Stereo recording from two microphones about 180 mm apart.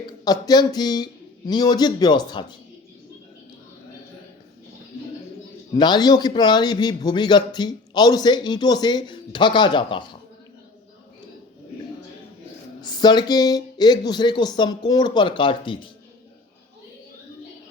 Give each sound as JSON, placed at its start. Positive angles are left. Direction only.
{"t": 0.3, "sound": "a man's voice", "side_deg": 20}
{"t": 5.7, "sound": "a man's voice", "side_deg": 25}
{"t": 12.8, "sound": "a man's voice", "side_deg": 25}